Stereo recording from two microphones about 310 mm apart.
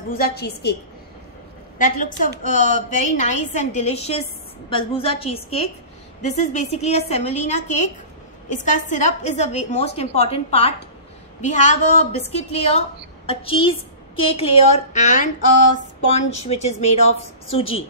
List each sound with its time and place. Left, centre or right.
0.1 s a woman's voice: left
1.8 s a woman's voice: left
16.4 s a woman's voice: left